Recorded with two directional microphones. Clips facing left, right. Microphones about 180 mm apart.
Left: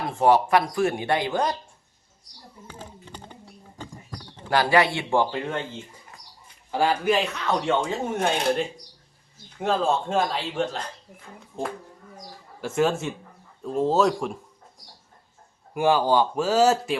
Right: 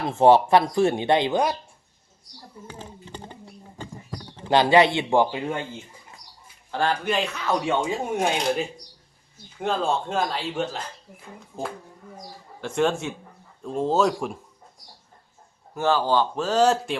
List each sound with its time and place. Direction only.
0.1 s speech: 25° right (ahead or behind)
4.4 s speech: 20° right (ahead or behind)
6.7 s speech: 10° left (ahead or behind); by 8.3 s 10° right (ahead or behind)
9.6 s speech: centre (ahead or behind)
15.7 s speech: 15° left (ahead or behind)